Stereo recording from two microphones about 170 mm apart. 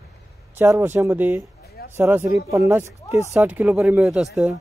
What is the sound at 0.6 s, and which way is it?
Speech, 15° right (ahead or behind).